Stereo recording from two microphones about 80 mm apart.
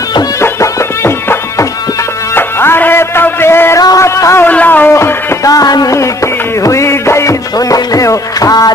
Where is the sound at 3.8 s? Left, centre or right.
Left.